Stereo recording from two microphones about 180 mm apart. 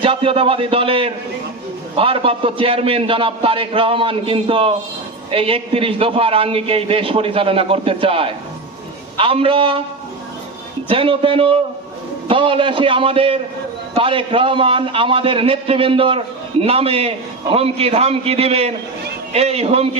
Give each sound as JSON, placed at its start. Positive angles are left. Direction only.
{"t": 0.0, "sound": "a man's voice", "side_deg": -30}
{"t": 10.8, "sound": "a man's voice", "side_deg": -30}